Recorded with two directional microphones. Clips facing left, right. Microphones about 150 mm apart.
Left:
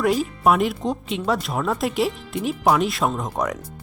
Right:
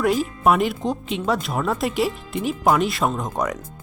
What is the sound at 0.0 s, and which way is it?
Speech, centre (ahead or behind).